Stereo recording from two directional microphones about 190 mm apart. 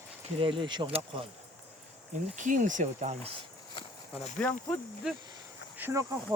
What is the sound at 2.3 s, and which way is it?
Speech, 40° right (ahead or behind).